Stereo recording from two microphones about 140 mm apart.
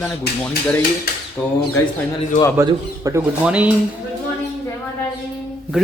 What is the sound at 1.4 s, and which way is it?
Speech, 10° left (ahead or behind).